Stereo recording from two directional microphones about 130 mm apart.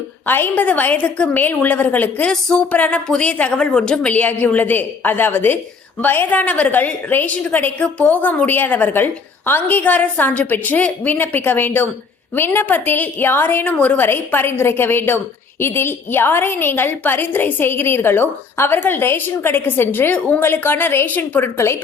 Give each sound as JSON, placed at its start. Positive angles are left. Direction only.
{"t": 0.3, "sound": "a woman's voice", "side_deg": 15}